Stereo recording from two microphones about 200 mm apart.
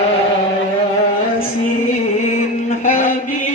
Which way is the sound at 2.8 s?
40° left (ahead or behind).